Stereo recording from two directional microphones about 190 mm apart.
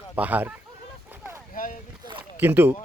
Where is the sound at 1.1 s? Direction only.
15° right (ahead or behind).